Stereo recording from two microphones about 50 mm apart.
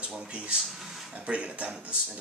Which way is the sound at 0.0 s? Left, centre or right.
Right.